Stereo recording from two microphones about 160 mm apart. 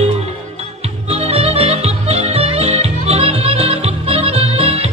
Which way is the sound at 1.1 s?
40° right (ahead or behind).